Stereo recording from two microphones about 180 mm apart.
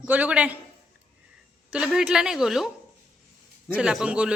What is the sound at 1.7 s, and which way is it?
Speech, 5° right (ahead or behind).